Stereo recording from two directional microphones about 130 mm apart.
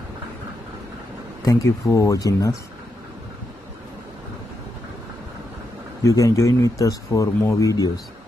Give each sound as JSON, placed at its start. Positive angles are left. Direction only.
{"t": 1.4, "sound": "a man's voice", "side_deg": 25}
{"t": 6.0, "sound": "a man's voice", "side_deg": 25}